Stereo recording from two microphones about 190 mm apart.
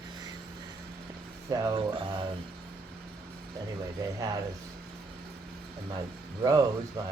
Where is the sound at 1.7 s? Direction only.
25° right (ahead or behind).